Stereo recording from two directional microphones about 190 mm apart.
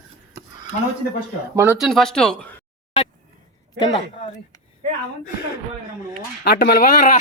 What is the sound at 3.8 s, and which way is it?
Speech, 20° left (ahead or behind).